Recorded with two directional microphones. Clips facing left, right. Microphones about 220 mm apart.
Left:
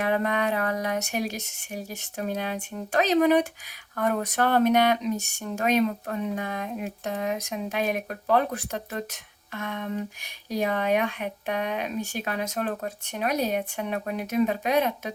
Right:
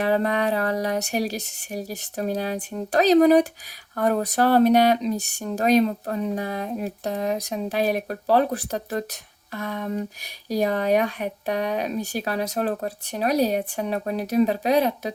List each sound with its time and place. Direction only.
0.0 s speech: 35° right (ahead or behind)